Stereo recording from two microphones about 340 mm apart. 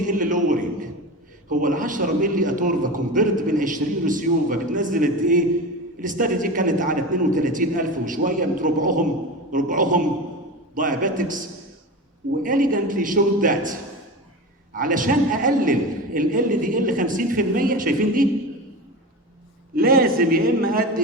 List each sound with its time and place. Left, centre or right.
0.1 s a man's voice: right
19.7 s a man's voice: right